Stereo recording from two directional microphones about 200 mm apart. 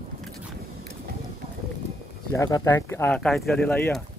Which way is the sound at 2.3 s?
15° left (ahead or behind).